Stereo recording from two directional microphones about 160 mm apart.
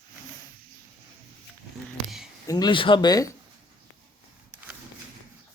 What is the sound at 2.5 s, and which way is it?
Speech, 25° left (ahead or behind).